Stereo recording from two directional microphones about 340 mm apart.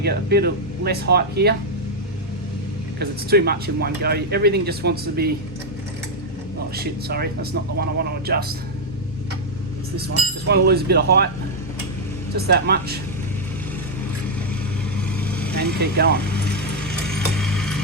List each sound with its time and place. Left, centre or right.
0.0 s speech: right
3.0 s speech: right
6.7 s speech: right
10.4 s speech: right
12.4 s speech: right
15.2 s vehicle: centre
15.5 s speech: right
17.1 s a sound: centre